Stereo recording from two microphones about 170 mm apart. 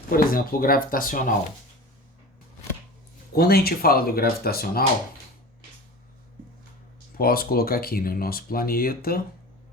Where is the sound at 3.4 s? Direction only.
65° left (ahead or behind).